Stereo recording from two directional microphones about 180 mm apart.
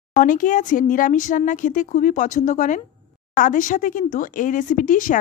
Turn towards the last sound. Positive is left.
turn(degrees=45)  # may be behind; listen again after turning